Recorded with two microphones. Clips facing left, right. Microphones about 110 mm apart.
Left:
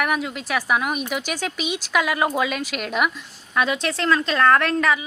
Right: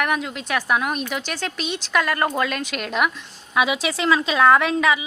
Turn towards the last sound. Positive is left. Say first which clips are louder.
# right 1 dB
turn(degrees=0)  # may be behind; listen again after turning